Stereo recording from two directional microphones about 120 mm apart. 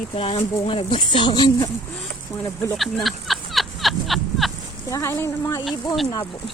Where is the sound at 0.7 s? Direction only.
45° left (ahead or behind).